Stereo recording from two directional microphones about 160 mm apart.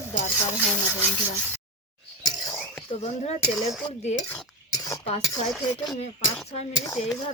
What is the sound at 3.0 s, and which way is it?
Speech, 45° left (ahead or behind).